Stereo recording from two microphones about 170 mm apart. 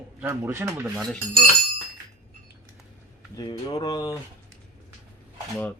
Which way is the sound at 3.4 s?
25° left (ahead or behind).